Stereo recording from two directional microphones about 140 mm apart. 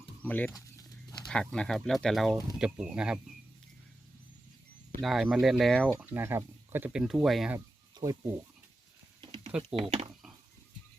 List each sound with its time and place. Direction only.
0.2 s speech: 10° left (ahead or behind)
0.5 s a sound: 25° left (ahead or behind)
1.3 s speech: 5° left (ahead or behind)
5.0 s speech: centre (ahead or behind)
6.0 s speech: 15° right (ahead or behind)
8.0 s speech: 30° right (ahead or behind)
9.2 s a sound: 40° right (ahead or behind)
9.6 s speech: 45° right (ahead or behind)